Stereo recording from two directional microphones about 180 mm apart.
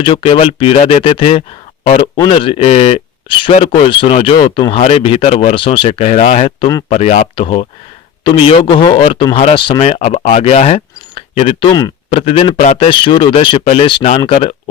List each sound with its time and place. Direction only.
0.0 s speech: 30° left (ahead or behind)